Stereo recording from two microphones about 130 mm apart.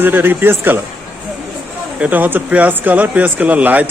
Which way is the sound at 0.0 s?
15° right (ahead or behind).